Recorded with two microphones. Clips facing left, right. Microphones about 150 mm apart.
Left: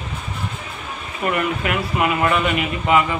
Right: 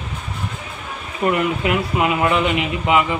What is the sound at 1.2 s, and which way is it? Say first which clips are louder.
Speech: right 3 dB; 20° right (ahead or behind).